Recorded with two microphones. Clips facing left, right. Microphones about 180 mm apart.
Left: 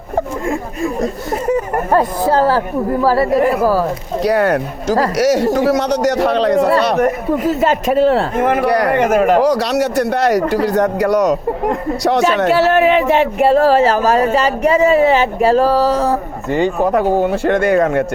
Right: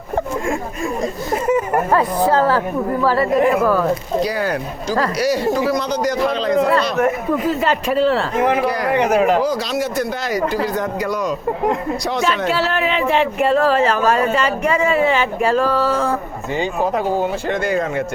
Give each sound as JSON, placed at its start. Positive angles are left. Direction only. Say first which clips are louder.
{"t": 0.4, "sound": "speech", "louder": "left 3 dB", "side_deg": 35}
{"t": 4.2, "sound": "a man's voice", "louder": "left 6 dB", "side_deg": 65}
{"t": 5.1, "sound": "a man's voice", "louder": "left 5 dB", "side_deg": 75}
{"t": 7.0, "sound": "speech", "louder": "left 2 dB", "side_deg": 40}
{"t": 8.6, "sound": "a man's voice", "louder": "left 5 dB", "side_deg": 70}
{"t": 9.0, "sound": "speech", "louder": "even", "side_deg": 50}
{"t": 9.4, "sound": "a man's voice", "louder": "left 6 dB", "side_deg": 70}
{"t": 12.5, "sound": "speech", "louder": "left 7 dB", "side_deg": 45}
{"t": 16.5, "sound": "speech", "louder": "left 5 dB", "side_deg": 60}